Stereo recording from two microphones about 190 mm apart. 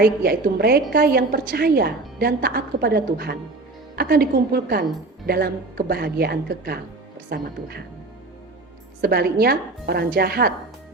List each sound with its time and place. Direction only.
0.0 s a woman's voice: 55° right (ahead or behind)
9.0 s a woman's voice: 55° right (ahead or behind)